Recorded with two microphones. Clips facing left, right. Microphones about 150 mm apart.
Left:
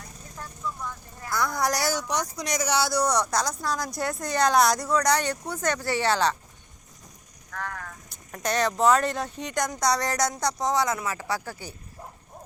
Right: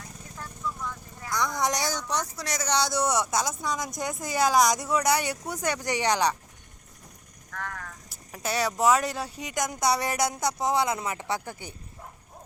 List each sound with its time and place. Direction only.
1.3 s speech: 5° left (ahead or behind)
3.0 s speech: 5° right (ahead or behind)
7.5 s a sound: 40° left (ahead or behind)
8.1 s speech: 5° right (ahead or behind); by 11.7 s 20° right (ahead or behind)